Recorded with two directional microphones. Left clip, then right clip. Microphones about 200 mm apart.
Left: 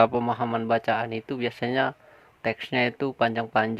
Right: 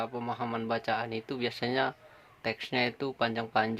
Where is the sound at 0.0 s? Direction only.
40° left (ahead or behind).